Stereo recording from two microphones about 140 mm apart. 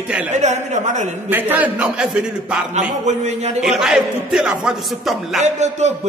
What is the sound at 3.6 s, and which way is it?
A man's voice, 5° right (ahead or behind).